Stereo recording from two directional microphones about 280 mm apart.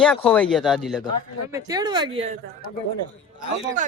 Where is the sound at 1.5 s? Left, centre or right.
Centre.